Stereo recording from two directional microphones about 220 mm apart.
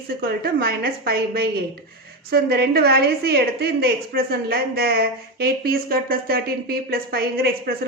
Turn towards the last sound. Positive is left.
turn(degrees=-45)  # may be behind; listen again after turning